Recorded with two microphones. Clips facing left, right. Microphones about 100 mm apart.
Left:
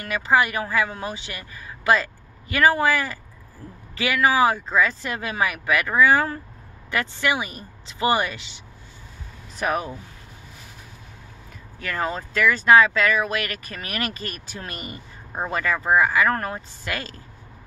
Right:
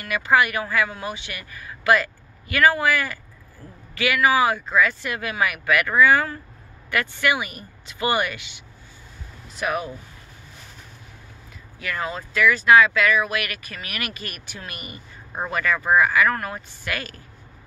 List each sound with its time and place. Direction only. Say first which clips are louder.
0.0 s speech: right 1 dB; 30° left (ahead or behind)
9.6 s speech: left 1 dB; 35° left (ahead or behind)
11.8 s speech: left 2 dB; 35° left (ahead or behind)